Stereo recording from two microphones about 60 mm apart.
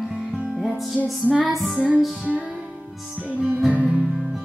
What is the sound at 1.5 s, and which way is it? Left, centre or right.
Music, centre.